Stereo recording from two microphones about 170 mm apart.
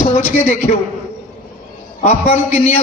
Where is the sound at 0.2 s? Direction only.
40° left (ahead or behind).